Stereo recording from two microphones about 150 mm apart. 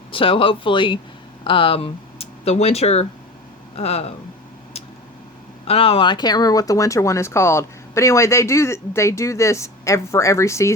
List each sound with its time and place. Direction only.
0.1 s speech: 35° left (ahead or behind)
5.6 s speech: 40° left (ahead or behind); by 10.8 s 20° left (ahead or behind)